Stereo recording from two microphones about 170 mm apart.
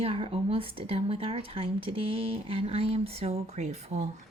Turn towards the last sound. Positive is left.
turn(degrees=-40)  # may be behind; listen again after turning